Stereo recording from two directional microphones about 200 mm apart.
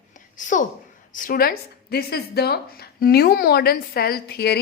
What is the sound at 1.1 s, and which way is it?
A woman's voice, 45° left (ahead or behind).